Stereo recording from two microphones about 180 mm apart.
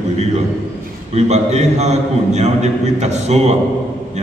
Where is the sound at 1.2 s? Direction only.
40° right (ahead or behind).